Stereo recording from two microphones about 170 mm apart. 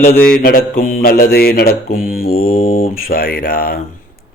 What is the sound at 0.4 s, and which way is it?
Mantra, 60° left (ahead or behind).